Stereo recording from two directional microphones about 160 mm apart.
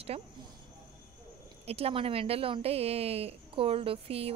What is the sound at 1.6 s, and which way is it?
Speech, 40° right (ahead or behind).